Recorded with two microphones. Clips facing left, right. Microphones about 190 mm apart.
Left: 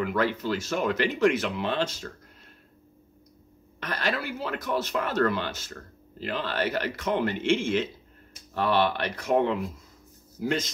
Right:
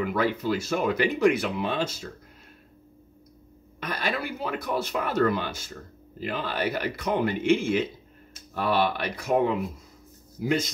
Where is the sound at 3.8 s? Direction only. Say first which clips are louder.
Even; 15° right (ahead or behind).